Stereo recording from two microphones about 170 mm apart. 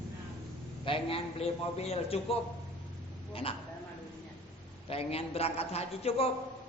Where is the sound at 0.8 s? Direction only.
30° left (ahead or behind).